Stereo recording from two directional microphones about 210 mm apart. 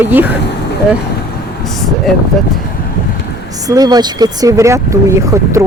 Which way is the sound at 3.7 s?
20° right (ahead or behind).